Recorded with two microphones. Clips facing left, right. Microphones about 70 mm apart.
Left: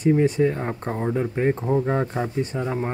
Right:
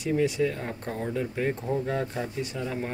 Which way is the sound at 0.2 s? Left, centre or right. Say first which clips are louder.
Left 5 dB; left.